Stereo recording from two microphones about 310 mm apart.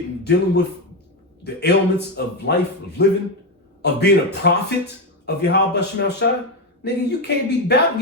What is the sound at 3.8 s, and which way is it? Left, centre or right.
Speech, left.